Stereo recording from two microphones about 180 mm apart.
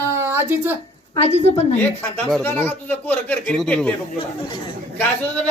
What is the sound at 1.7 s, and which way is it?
A man's voice, 10° left (ahead or behind).